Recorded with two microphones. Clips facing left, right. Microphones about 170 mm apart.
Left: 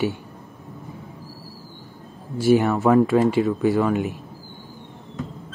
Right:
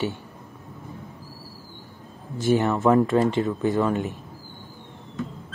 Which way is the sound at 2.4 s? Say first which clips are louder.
Left 3 dB; 15° left (ahead or behind).